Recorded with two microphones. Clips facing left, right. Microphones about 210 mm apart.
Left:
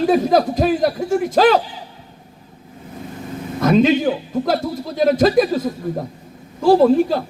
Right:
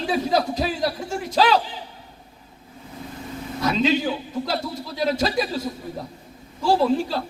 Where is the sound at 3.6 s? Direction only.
50° left (ahead or behind).